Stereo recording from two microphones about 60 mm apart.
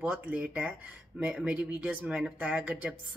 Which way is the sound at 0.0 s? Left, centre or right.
Right.